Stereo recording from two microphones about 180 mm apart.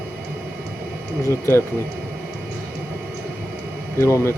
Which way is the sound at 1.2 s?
15° left (ahead or behind).